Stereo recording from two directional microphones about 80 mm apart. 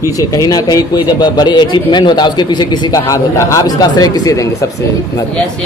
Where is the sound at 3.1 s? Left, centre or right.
Left.